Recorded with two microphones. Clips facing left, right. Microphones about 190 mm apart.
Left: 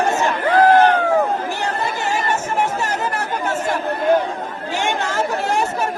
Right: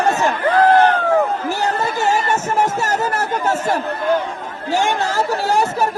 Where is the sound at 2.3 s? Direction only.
40° right (ahead or behind).